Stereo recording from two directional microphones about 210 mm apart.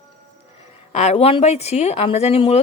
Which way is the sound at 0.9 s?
30° left (ahead or behind).